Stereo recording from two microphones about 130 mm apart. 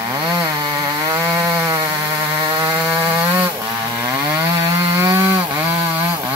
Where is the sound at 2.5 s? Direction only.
35° right (ahead or behind).